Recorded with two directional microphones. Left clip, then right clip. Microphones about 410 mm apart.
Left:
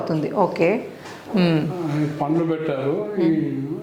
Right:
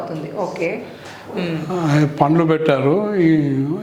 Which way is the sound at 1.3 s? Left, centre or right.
Left.